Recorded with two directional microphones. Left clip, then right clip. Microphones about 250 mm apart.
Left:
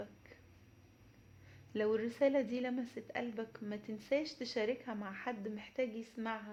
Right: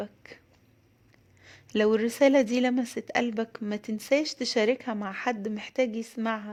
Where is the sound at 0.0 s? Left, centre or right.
Right.